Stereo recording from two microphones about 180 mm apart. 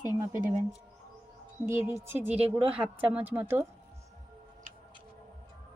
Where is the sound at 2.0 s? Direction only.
15° right (ahead or behind).